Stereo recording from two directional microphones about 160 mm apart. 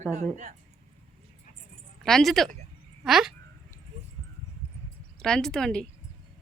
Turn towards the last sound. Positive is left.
turn(degrees=5)  # may be behind; listen again after turning